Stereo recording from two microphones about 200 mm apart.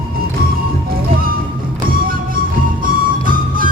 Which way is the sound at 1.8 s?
45° right (ahead or behind).